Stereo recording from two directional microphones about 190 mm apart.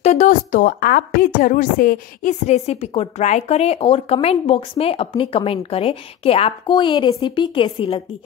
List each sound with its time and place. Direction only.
0.0 s a woman's voice: 40° left (ahead or behind)